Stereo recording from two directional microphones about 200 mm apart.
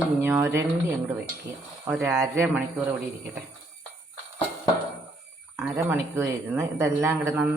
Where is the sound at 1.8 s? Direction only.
10° right (ahead or behind).